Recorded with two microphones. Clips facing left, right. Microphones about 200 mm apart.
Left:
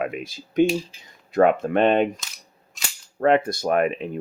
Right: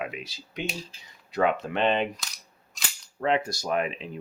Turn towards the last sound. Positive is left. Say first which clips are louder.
# left 7 dB
turn(degrees=55)  # may be behind; listen again after turning